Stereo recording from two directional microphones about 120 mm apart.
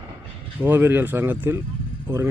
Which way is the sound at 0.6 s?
15° right (ahead or behind).